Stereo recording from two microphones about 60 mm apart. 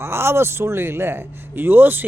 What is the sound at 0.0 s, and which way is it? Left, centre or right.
Speech, right.